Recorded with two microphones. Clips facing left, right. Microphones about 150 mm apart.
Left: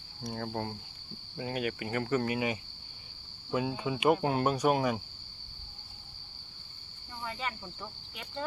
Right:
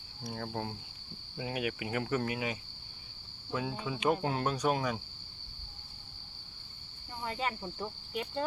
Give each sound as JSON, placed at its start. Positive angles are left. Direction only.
{"t": 0.2, "sound": "cricket", "side_deg": 0}
{"t": 3.5, "sound": "speech", "side_deg": 5}
{"t": 7.3, "sound": "cricket", "side_deg": -35}